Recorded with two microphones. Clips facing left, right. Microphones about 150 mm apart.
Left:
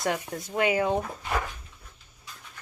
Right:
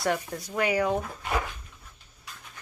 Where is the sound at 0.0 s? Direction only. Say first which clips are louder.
Right 1 dB; 20° left (ahead or behind).